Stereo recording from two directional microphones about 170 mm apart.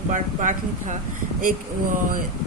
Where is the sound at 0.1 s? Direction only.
45° right (ahead or behind).